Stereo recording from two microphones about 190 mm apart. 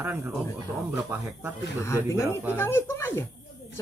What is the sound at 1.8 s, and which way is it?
Speech, 15° left (ahead or behind).